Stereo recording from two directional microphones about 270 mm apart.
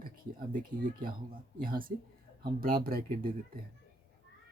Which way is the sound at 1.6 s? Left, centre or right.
Right.